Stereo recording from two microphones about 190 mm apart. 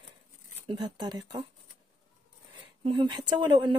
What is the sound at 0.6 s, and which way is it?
Speech, 25° right (ahead or behind).